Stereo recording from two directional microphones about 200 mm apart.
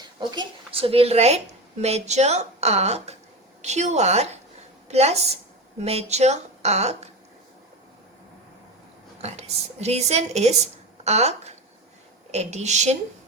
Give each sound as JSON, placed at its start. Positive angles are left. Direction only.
{"t": 0.0, "sound": "a woman's voice", "side_deg": -20}
{"t": 9.2, "sound": "a woman's voice", "side_deg": -30}